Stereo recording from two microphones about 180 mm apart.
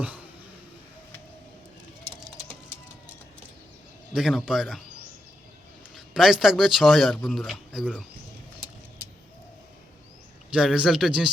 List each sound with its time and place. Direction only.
4.1 s speech: centre (ahead or behind)
6.1 s speech: centre (ahead or behind)
10.5 s speech: 5° right (ahead or behind)